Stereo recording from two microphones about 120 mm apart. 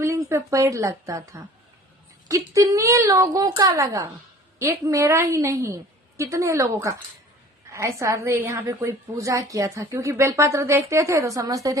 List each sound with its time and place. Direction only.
0.0 s a woman's voice: 25° right (ahead or behind)